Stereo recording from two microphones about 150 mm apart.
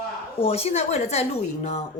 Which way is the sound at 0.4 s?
45° left (ahead or behind).